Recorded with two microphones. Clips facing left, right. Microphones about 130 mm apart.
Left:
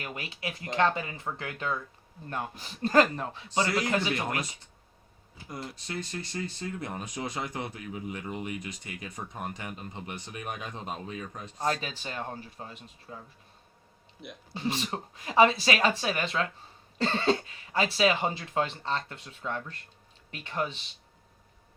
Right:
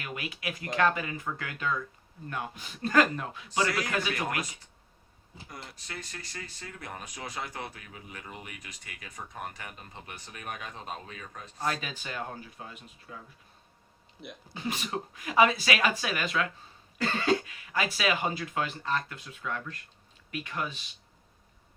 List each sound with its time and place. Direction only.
0.0 s speech: 30° left (ahead or behind)
5.7 s speech: 25° left (ahead or behind)
11.6 s speech: 30° left (ahead or behind)
14.5 s speech: 30° left (ahead or behind)